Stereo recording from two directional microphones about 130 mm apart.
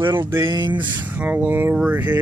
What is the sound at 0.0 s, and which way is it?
Speech, 40° right (ahead or behind).